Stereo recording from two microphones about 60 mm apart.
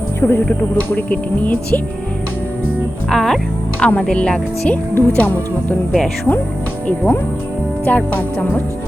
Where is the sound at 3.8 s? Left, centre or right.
Left.